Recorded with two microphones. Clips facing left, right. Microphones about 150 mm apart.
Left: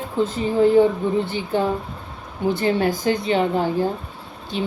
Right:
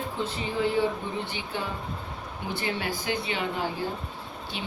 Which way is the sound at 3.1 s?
45° left (ahead or behind).